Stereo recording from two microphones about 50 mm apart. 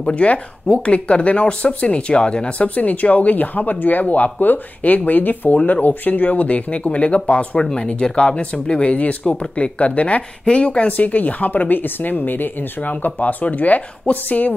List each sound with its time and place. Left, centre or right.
0.1 s speech: left